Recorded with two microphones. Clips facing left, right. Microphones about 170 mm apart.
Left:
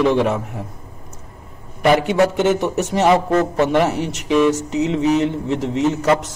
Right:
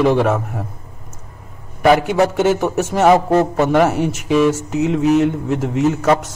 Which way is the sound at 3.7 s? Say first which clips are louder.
Right 6 dB; 50° right (ahead or behind).